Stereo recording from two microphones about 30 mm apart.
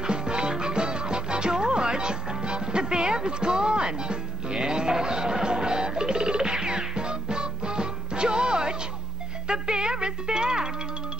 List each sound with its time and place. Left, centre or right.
0.0 s music: right